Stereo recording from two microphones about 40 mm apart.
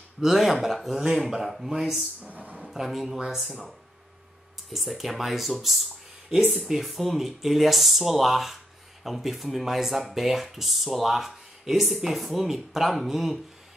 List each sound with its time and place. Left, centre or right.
0.2 s speech: centre
2.2 s a sound: right
2.6 s speech: centre
4.6 s speech: centre